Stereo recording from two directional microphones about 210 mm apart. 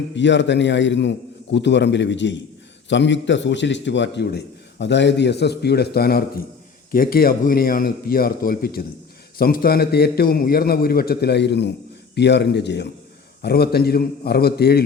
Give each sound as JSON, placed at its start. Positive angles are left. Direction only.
{"t": 0.1, "sound": "a man's voice", "side_deg": 55}